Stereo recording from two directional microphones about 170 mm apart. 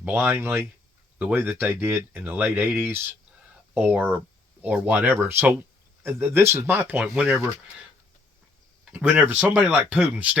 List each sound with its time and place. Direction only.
0.0 s speech: 10° right (ahead or behind)
8.8 s speech: 5° right (ahead or behind)